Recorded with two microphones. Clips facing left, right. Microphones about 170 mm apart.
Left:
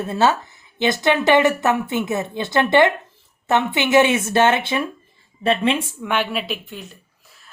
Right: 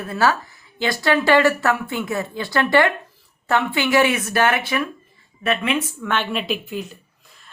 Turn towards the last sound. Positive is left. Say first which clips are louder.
# even
turn(degrees=5)  # may be behind; listen again after turning